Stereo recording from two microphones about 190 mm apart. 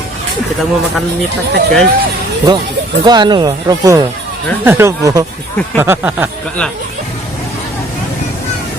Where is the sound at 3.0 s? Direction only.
20° right (ahead or behind).